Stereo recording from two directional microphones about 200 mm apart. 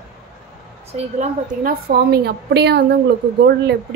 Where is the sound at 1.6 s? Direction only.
50° right (ahead or behind).